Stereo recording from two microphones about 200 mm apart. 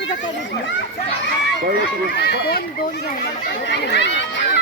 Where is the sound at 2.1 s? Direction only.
55° left (ahead or behind).